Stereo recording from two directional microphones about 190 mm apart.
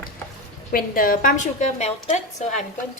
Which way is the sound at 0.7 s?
50° left (ahead or behind).